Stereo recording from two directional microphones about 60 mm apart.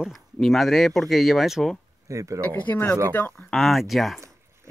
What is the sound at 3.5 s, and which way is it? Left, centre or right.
Speech, centre.